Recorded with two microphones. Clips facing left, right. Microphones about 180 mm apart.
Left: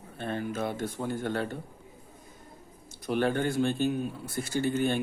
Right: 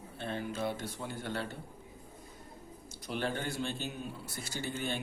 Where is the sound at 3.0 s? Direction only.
55° left (ahead or behind).